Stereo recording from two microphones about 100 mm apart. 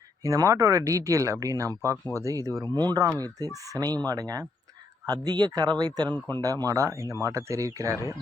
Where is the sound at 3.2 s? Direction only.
40° right (ahead or behind).